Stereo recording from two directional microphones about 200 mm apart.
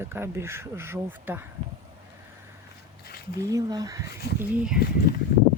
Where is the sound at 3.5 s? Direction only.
20° right (ahead or behind).